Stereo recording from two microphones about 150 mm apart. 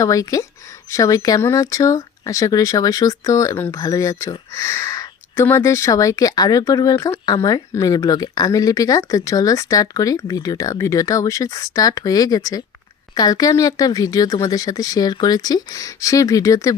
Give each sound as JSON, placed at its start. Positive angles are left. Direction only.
{"t": 0.0, "sound": "speech", "side_deg": 20}